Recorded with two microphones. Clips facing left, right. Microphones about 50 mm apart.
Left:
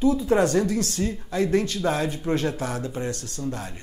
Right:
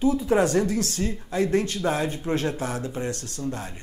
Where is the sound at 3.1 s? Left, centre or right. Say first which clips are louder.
Even; right.